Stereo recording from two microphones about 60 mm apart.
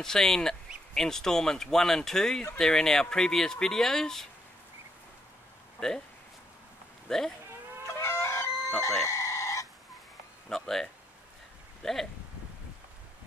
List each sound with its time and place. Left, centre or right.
0.0 s speech: centre
5.8 s speech: centre
7.1 s speech: centre
7.8 s chicken: left
10.5 s speech: centre